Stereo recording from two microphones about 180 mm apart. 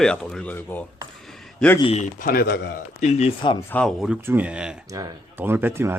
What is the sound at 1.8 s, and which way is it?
Speech, 35° left (ahead or behind).